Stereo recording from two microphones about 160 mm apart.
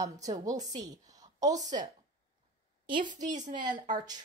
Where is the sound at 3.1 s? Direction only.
50° right (ahead or behind).